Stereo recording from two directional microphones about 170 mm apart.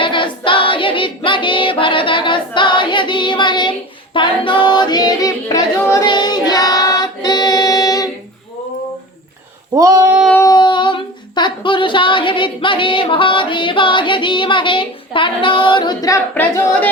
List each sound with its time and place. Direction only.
0.0 s child singing: 30° left (ahead or behind)
9.7 s female singing: 20° right (ahead or behind)
10.3 s humming: 20° left (ahead or behind)